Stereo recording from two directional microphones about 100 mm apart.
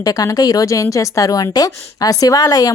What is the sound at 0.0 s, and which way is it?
Speech, 40° left (ahead or behind).